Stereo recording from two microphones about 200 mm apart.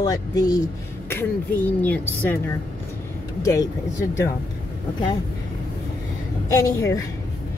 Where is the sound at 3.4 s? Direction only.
15° left (ahead or behind).